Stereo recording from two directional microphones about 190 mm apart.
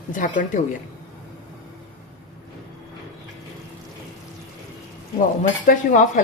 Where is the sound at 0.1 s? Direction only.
45° left (ahead or behind).